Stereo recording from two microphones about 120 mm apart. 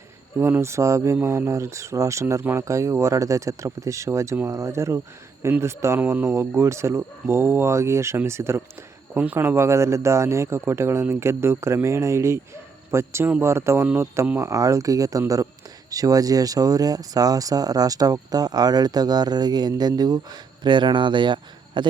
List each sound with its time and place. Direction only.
0.3 s speech: 20° right (ahead or behind); by 21.8 s 40° right (ahead or behind)